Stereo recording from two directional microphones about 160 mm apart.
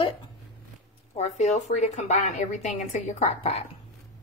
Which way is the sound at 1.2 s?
45° left (ahead or behind).